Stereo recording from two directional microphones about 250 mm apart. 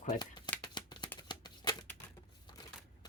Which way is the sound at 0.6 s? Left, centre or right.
Centre.